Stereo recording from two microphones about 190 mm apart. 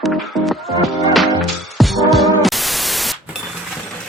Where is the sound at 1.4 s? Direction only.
Centre (ahead or behind).